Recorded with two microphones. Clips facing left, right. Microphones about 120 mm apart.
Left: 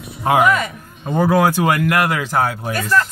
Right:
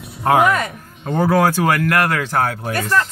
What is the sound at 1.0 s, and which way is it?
A man's voice, 10° left (ahead or behind).